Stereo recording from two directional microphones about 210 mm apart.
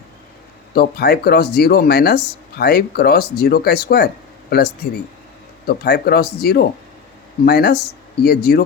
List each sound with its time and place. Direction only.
0.7 s speech: 50° left (ahead or behind)